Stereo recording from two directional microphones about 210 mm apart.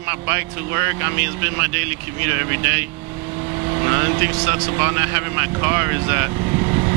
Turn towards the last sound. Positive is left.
turn(degrees=-15)  # may be behind; listen again after turning